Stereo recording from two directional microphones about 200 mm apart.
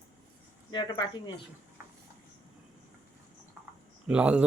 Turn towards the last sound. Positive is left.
turn(degrees=-5)  # may be behind; listen again after turning